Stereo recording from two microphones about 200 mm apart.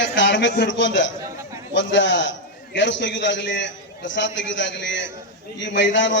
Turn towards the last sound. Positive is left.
turn(degrees=65)  # may be behind; listen again after turning